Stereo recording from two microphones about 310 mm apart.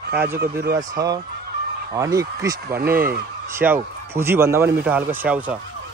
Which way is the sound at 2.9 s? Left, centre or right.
Right.